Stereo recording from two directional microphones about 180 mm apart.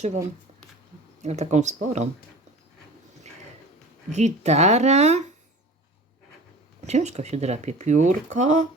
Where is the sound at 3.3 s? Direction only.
40° right (ahead or behind).